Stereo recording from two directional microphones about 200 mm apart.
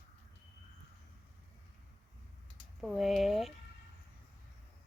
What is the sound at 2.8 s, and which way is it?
Speech, centre (ahead or behind).